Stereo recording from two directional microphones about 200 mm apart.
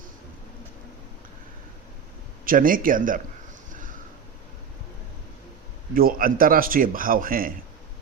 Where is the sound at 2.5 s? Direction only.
45° right (ahead or behind).